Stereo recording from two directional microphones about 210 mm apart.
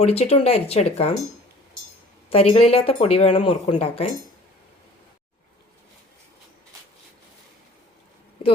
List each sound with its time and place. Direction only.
0.0 s speech: 30° left (ahead or behind)
2.3 s speech: 30° left (ahead or behind)